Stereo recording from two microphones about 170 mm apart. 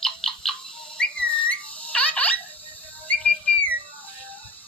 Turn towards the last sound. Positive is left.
turn(degrees=10)  # may be behind; listen again after turning